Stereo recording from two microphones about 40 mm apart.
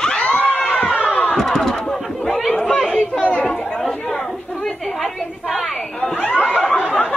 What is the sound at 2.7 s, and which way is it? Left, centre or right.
Chatter, centre.